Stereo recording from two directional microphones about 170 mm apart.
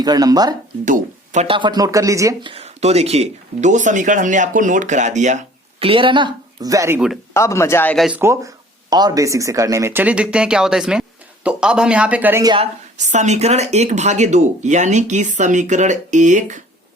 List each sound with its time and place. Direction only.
0.0 s a woman's voice: 25° right (ahead or behind)
0.9 s speech: 45° right (ahead or behind)
1.5 s a woman's voice: 30° right (ahead or behind)
2.5 s speech: 35° right (ahead or behind)
5.8 s a woman's voice: 30° right (ahead or behind)
7.3 s speech: 15° left (ahead or behind)
7.9 s speech: 5° right (ahead or behind)
8.2 s speech: 15° right (ahead or behind)
12.4 s a woman's voice: 25° right (ahead or behind)
13.0 s speech: 45° right (ahead or behind)